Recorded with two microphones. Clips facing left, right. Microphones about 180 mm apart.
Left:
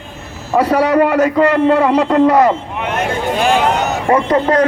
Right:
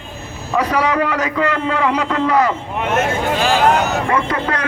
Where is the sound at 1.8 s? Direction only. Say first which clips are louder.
Left 6 dB; 40° left (ahead or behind).